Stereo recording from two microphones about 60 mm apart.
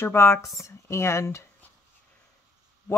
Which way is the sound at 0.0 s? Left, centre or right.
Left.